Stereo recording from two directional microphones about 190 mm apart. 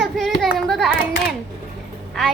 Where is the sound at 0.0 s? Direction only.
Centre (ahead or behind).